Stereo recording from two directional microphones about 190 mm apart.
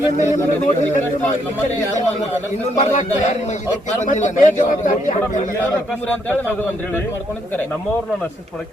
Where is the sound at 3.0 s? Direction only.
35° left (ahead or behind).